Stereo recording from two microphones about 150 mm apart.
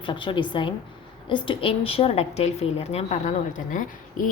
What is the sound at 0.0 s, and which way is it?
A woman's voice, 35° left (ahead or behind).